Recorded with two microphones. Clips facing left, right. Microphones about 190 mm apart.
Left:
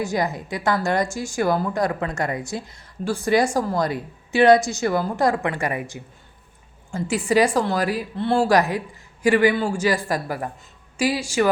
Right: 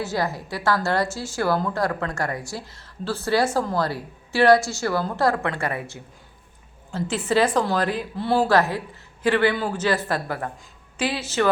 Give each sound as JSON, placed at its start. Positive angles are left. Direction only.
{"t": 0.0, "sound": "a woman's voice", "side_deg": 15}
{"t": 8.1, "sound": "speech", "side_deg": -5}
{"t": 8.4, "sound": "a woman's voice", "side_deg": 15}